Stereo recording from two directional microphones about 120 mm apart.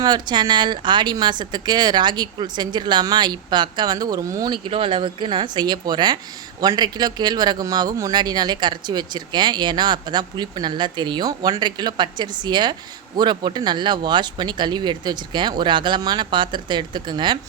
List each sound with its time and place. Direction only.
0.0 s speech: 35° right (ahead or behind)